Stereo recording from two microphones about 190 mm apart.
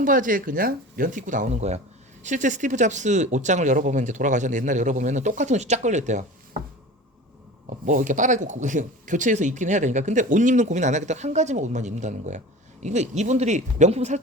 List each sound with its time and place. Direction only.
0.0 s speech: 45° right (ahead or behind)
7.9 s speech: 40° right (ahead or behind)